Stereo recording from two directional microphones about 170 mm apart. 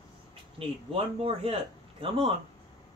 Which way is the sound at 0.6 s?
35° right (ahead or behind).